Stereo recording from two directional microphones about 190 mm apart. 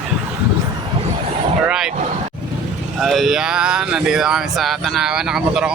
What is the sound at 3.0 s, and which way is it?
Speech, centre (ahead or behind).